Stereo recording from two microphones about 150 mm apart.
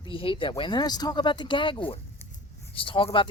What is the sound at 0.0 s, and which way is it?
Speech, 35° left (ahead or behind).